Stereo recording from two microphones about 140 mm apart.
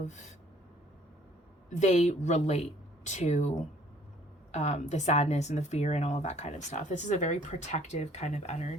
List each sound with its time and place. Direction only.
1.8 s speech: 55° left (ahead or behind)